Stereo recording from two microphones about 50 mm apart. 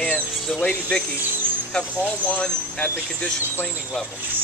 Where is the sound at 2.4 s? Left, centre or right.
Centre.